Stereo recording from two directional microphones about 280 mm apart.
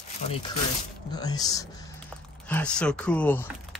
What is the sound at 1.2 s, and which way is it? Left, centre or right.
Speech, centre.